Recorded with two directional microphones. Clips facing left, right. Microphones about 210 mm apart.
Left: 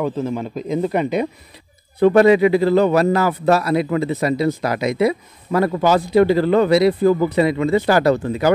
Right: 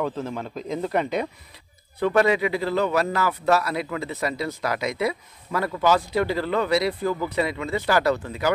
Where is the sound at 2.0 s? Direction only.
30° left (ahead or behind).